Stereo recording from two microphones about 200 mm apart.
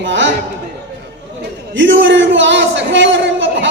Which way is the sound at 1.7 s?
70° right (ahead or behind).